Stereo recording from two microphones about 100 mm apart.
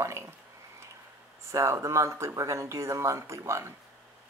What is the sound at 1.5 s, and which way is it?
Speech, 30° right (ahead or behind).